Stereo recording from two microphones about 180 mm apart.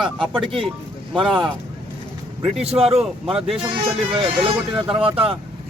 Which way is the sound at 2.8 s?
35° right (ahead or behind).